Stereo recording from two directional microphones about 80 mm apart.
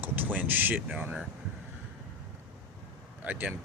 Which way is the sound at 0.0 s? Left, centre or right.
Right.